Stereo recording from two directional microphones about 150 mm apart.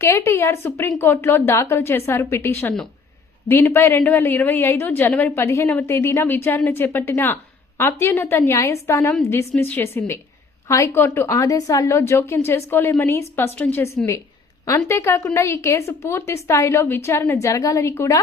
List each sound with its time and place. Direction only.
0.0 s a woman's voice: 20° left (ahead or behind)